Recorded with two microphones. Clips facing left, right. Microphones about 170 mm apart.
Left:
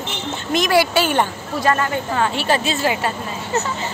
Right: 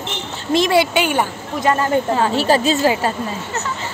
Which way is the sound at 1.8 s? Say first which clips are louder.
Right 4 dB; 35° right (ahead or behind).